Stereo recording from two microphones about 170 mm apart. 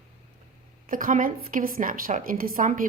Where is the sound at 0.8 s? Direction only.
55° right (ahead or behind).